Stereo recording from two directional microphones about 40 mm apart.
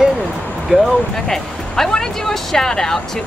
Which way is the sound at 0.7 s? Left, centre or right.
Centre.